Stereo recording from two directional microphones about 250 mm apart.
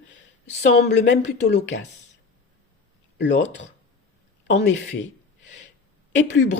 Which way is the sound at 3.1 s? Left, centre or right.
Left.